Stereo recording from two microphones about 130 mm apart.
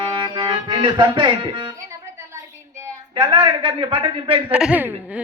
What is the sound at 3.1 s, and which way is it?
A man's voice, 35° right (ahead or behind).